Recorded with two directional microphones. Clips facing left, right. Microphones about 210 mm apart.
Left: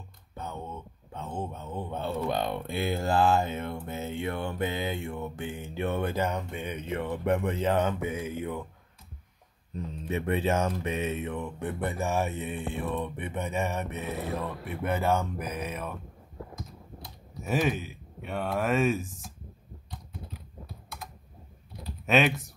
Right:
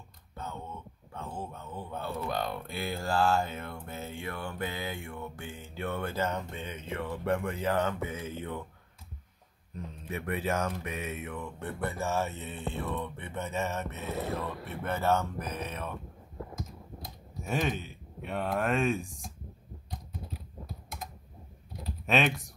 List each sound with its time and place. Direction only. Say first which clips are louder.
0.4 s speech: left 3 dB; 20° left (ahead or behind)
10.0 s speech: left 5 dB; 25° left (ahead or behind); by 15.9 s 10° left (ahead or behind)
17.5 s speech: left 4 dB; 5° left (ahead or behind)
22.0 s speech: left 3 dB; centre (ahead or behind)